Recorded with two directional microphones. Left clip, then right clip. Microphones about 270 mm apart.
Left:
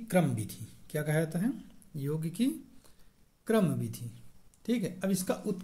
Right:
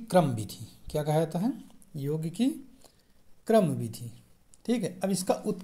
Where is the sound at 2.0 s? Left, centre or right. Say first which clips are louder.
Right 3 dB; centre.